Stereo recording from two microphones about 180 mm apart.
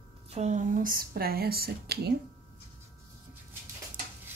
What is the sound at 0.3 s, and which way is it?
Speech, 40° right (ahead or behind).